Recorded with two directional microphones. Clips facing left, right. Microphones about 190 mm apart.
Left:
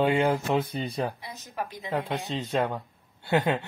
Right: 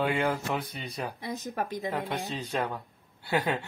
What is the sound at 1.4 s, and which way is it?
Speech, 50° right (ahead or behind).